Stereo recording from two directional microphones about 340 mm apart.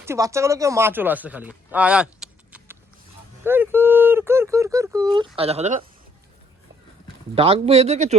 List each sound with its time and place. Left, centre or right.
0.0 s speech: centre
7.3 s speech: centre